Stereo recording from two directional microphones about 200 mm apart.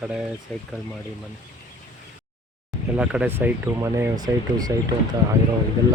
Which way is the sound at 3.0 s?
5° right (ahead or behind).